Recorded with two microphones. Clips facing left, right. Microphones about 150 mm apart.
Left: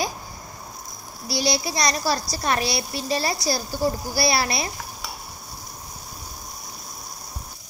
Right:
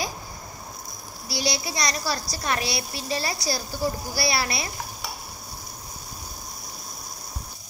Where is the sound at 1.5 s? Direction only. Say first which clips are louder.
Left 5 dB; 30° left (ahead or behind).